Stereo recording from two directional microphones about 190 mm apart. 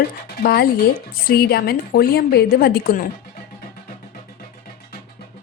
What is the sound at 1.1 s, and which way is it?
A woman's voice, 55° left (ahead or behind).